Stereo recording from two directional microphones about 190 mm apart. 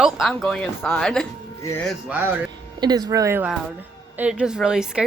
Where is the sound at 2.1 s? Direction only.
10° right (ahead or behind).